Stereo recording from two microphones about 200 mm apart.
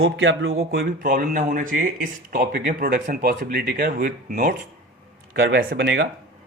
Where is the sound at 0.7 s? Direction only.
50° right (ahead or behind).